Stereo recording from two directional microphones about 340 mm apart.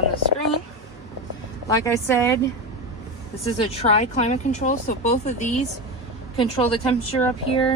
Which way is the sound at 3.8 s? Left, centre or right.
Centre.